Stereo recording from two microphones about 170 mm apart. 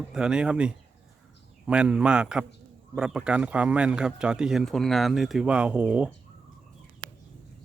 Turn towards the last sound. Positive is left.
turn(degrees=-10)  # may be behind; listen again after turning